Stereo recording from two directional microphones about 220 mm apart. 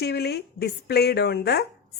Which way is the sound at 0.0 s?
45° left (ahead or behind).